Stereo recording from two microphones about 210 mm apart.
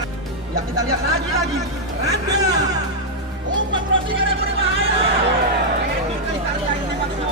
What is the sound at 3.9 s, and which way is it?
Speech, 65° right (ahead or behind).